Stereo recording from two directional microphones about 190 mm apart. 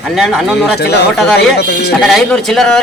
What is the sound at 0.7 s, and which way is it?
Speech, 60° left (ahead or behind).